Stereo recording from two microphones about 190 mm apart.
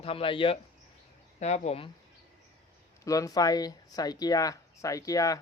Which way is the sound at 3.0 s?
20° left (ahead or behind).